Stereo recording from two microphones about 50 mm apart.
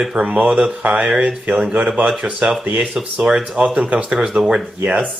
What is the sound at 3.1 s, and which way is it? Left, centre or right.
Speech, centre.